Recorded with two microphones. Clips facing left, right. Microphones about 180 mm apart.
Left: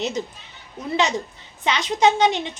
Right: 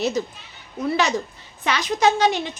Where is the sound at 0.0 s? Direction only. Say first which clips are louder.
Right 3 dB; 20° left (ahead or behind).